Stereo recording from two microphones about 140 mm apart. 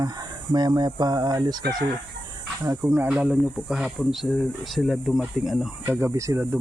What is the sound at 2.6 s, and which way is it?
Speech, 20° right (ahead or behind).